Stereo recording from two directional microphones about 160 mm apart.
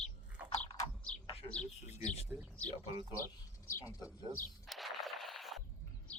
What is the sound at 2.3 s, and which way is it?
Speech, 10° right (ahead or behind).